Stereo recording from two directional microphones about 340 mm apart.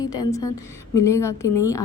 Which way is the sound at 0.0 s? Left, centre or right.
Centre.